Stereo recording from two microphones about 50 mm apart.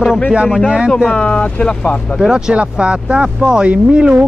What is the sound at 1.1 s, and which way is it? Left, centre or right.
Speech, centre.